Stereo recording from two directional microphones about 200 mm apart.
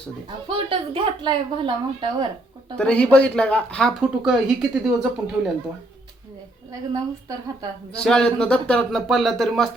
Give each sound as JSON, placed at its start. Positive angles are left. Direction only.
{"t": 0.4, "sound": "speech", "side_deg": -25}
{"t": 2.7, "sound": "speech", "side_deg": 5}
{"t": 6.9, "sound": "speech", "side_deg": -20}
{"t": 7.9, "sound": "speech", "side_deg": 5}